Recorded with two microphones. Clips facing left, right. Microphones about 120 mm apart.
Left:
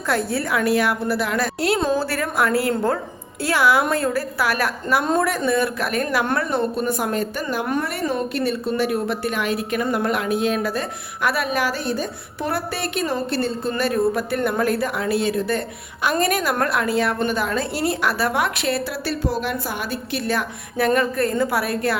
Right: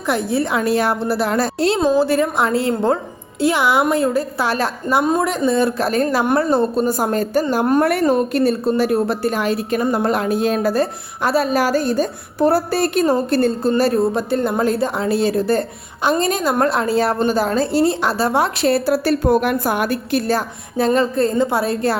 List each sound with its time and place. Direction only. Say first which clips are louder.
0.1 s a woman's voice: right 3 dB; 15° right (ahead or behind)
1.8 s a woman's voice: right 6 dB; 15° right (ahead or behind); by 7.9 s 40° right (ahead or behind)
7.9 s a woman's voice: right 8 dB; 60° right (ahead or behind); by 15.6 s 35° right (ahead or behind)
16.0 s a woman's voice: right 3 dB; 25° right (ahead or behind); by 20.2 s 50° right (ahead or behind)
20.2 s a woman's voice: right 4 dB; 30° right (ahead or behind)